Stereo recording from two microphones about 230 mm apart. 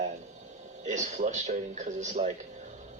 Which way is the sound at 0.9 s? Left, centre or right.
Right.